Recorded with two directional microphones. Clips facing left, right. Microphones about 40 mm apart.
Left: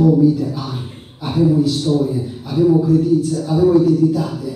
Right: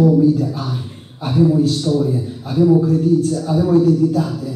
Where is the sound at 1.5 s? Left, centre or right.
Centre.